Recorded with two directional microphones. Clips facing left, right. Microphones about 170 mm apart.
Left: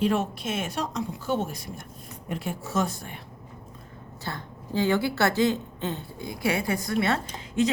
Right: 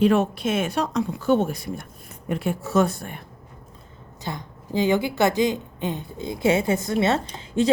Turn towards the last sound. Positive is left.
turn(degrees=-30)  # may be behind; listen again after turning